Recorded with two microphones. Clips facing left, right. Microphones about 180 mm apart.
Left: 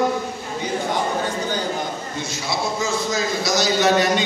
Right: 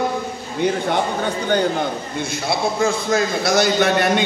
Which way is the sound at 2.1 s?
55° right (ahead or behind).